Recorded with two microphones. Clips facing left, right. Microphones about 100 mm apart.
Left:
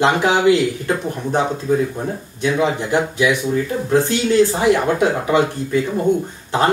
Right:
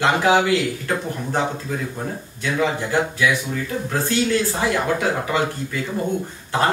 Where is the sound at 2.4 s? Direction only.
20° left (ahead or behind).